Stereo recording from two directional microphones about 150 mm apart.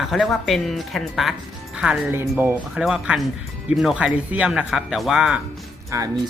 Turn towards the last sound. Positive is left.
turn(degrees=-25)  # may be behind; listen again after turning